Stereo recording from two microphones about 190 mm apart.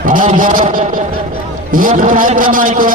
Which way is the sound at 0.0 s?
45° right (ahead or behind).